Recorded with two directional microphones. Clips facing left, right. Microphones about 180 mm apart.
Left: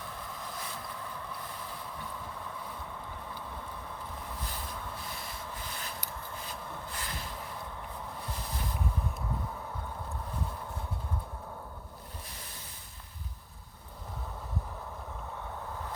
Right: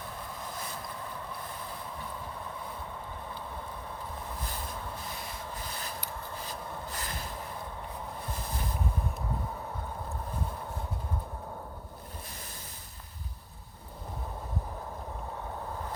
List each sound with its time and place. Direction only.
6.5 s rub: 40° right (ahead or behind)